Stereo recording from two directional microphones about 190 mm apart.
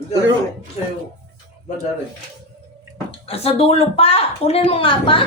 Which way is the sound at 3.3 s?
30° left (ahead or behind).